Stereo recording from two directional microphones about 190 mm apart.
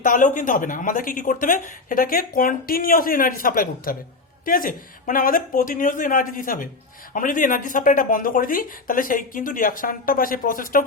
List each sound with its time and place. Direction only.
0.0 s speech: 45° left (ahead or behind)